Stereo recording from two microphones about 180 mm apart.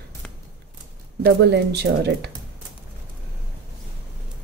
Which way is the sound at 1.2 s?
70° right (ahead or behind).